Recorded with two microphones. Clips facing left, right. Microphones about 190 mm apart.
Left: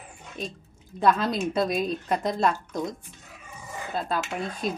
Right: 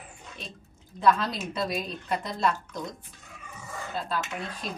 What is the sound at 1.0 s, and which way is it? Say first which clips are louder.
A woman's voice: left 2 dB; 50° left (ahead or behind).